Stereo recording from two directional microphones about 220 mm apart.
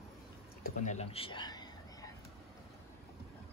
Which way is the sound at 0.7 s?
30° left (ahead or behind).